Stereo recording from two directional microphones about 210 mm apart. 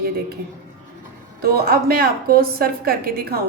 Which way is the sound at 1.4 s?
45° right (ahead or behind).